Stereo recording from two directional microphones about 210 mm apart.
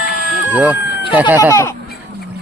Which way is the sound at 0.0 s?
40° left (ahead or behind).